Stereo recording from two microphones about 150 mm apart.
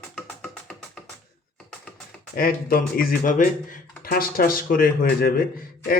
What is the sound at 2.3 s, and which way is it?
Speech, 75° left (ahead or behind).